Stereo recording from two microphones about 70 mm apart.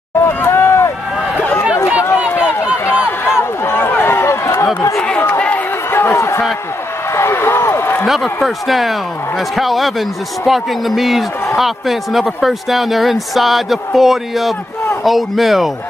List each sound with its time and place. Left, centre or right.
0.2 s run: left
5.0 s run: centre
5.9 s a sound: left
8.1 s speech: centre